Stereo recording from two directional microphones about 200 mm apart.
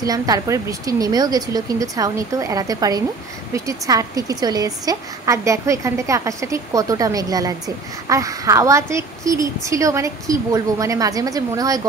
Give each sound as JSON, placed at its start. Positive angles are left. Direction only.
{"t": 0.0, "sound": "a woman's voice", "side_deg": -20}